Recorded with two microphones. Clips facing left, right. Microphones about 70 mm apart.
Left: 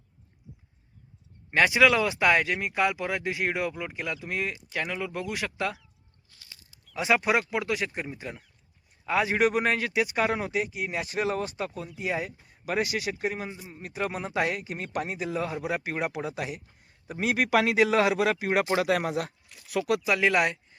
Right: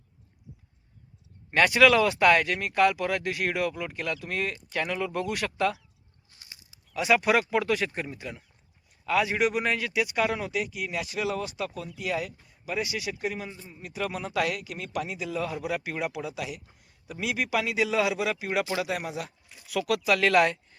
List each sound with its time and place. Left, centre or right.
1.5 s speech: centre
6.3 s a sound: right
6.9 s speech: left
9.0 s speech: left
9.3 s speech: left
12.6 s speech: left
13.5 s speech: centre
13.7 s speech: left
18.9 s speech: left
19.9 s speech: centre